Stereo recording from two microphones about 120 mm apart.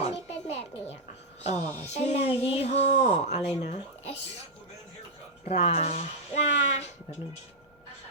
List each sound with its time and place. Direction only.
0.0 s music: 60° left (ahead or behind)
1.5 s speech: 70° left (ahead or behind)
5.5 s speech: 60° left (ahead or behind)